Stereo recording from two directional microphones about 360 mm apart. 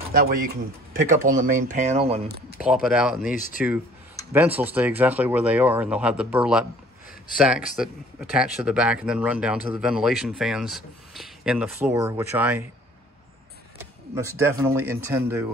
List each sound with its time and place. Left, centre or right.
0.1 s speech: right
2.6 s speech: centre
3.3 s speech: left
4.3 s speech: centre
14.1 s speech: centre